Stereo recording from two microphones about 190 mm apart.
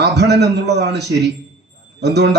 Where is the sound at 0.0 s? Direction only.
60° right (ahead or behind).